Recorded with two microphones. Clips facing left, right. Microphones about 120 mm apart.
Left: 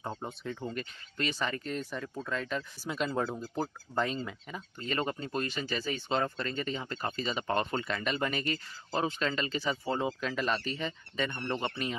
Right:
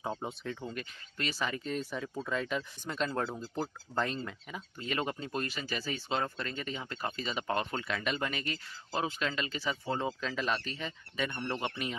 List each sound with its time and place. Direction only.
0.0 s speech: 5° right (ahead or behind)